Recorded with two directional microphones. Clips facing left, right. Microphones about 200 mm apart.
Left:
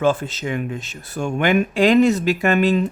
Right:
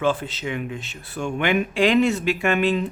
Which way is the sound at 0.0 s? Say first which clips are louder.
Left 4 dB; 45° left (ahead or behind).